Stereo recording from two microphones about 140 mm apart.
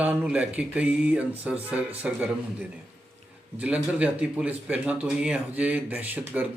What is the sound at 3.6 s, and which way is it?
Speech, 10° right (ahead or behind).